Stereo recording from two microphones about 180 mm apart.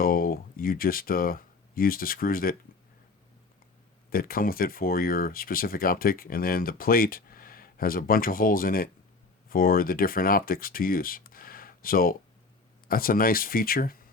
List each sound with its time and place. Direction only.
0.0 s speech: 55° left (ahead or behind)
4.1 s speech: 55° left (ahead or behind)